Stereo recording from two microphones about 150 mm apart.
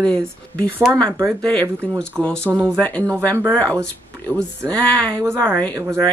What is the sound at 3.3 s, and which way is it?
Speech, 15° right (ahead or behind).